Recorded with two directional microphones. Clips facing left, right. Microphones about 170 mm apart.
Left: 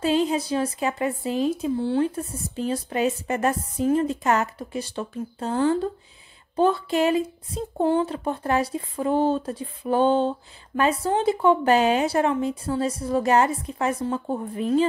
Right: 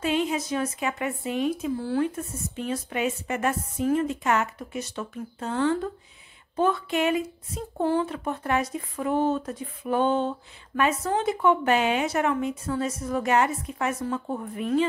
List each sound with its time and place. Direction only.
0.0 s speech: 35° left (ahead or behind)